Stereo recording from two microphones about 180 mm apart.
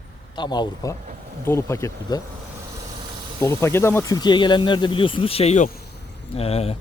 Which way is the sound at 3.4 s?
15° left (ahead or behind).